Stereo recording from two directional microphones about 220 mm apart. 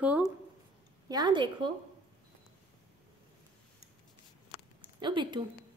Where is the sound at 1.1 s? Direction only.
20° right (ahead or behind).